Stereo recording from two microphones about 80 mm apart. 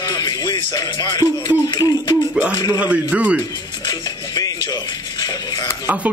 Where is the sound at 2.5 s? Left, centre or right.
Left.